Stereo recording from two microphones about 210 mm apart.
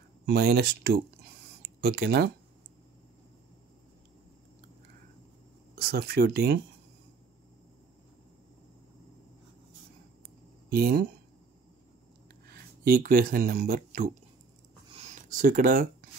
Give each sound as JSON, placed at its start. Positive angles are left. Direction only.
{"t": 0.3, "sound": "speech", "side_deg": -50}
{"t": 5.8, "sound": "speech", "side_deg": -50}
{"t": 10.7, "sound": "speech", "side_deg": -45}
{"t": 12.8, "sound": "speech", "side_deg": -45}
{"t": 15.2, "sound": "speech", "side_deg": -40}